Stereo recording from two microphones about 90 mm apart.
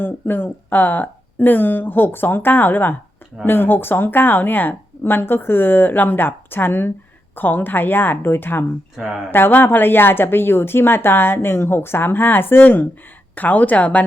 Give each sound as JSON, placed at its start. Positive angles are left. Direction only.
{"t": 0.0, "sound": "speech", "side_deg": 20}